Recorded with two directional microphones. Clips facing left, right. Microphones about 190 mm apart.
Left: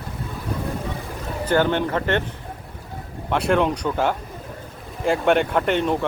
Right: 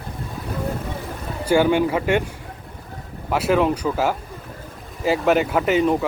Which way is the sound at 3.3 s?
5° right (ahead or behind).